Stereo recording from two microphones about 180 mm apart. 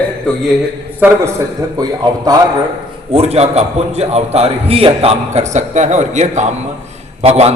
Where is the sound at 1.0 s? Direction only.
15° right (ahead or behind).